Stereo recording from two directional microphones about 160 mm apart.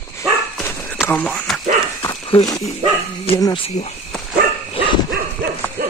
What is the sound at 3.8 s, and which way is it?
Speech, 50° left (ahead or behind).